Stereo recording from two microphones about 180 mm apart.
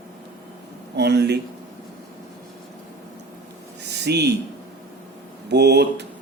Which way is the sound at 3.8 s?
70° right (ahead or behind).